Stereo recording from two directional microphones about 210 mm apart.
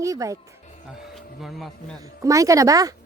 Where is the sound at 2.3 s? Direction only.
15° right (ahead or behind).